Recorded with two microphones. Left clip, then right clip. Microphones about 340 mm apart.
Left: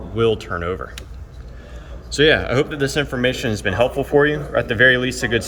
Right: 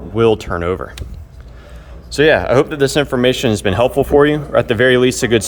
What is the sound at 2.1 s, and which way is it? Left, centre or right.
Speech, centre.